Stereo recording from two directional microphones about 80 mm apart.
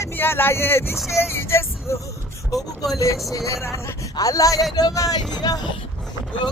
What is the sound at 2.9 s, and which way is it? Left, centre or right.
A man's voice, left.